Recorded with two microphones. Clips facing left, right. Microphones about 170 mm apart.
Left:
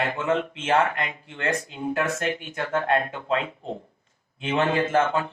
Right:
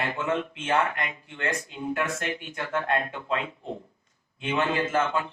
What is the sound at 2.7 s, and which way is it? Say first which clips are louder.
Speech: left 4 dB; 30° left (ahead or behind).